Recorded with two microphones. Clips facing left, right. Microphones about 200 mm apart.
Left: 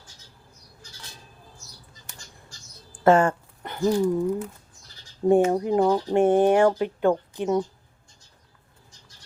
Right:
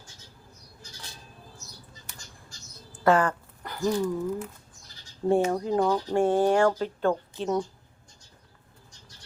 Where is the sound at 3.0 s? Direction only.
25° left (ahead or behind).